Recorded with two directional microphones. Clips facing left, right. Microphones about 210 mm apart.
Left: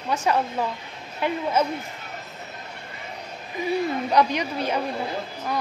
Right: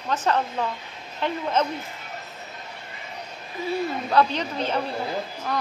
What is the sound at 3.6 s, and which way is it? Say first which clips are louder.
A woman's voice: left 2 dB; 15° left (ahead or behind).